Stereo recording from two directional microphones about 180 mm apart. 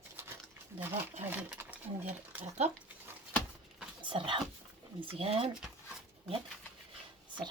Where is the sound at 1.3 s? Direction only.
10° right (ahead or behind).